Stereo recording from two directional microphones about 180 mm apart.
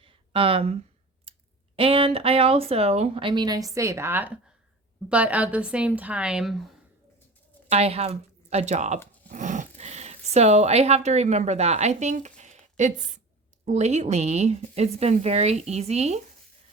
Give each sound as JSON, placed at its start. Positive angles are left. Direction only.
{"t": 0.0, "sound": "a sound", "side_deg": -30}
{"t": 1.3, "sound": "clicking", "side_deg": -30}
{"t": 1.7, "sound": "a woman's voice", "side_deg": -30}
{"t": 7.7, "sound": "speech", "side_deg": -35}